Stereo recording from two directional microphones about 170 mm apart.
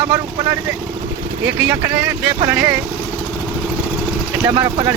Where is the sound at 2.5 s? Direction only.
10° right (ahead or behind).